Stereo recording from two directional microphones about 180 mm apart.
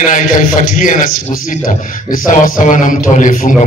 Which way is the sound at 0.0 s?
45° left (ahead or behind).